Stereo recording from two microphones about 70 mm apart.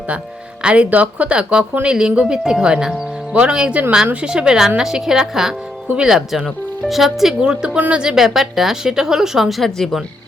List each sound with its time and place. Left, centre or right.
0.6 s a woman's voice: centre